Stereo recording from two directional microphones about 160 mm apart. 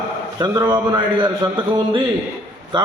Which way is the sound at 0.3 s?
25° right (ahead or behind).